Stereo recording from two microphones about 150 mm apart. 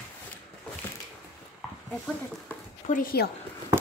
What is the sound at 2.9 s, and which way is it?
Speech, 75° left (ahead or behind).